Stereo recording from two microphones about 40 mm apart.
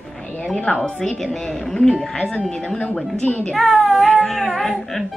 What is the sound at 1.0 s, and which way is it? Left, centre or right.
Speech, centre.